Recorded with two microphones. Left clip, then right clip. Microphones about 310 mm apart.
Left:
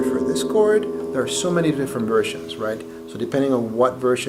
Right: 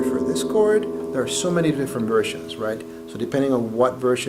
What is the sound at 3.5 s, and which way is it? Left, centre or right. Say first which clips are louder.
Speech: left 1 dB; left.